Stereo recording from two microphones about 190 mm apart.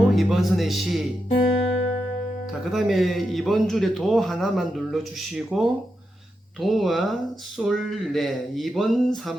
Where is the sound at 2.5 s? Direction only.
Centre (ahead or behind).